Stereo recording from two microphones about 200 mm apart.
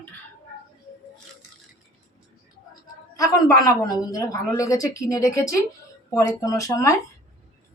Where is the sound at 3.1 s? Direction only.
15° left (ahead or behind).